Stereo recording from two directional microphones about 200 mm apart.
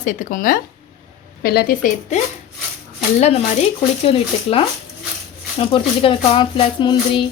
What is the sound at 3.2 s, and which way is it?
Speech, 30° left (ahead or behind).